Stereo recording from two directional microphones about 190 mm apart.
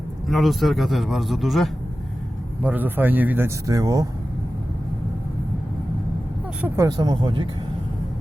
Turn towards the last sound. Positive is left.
turn(degrees=-25)  # may be behind; listen again after turning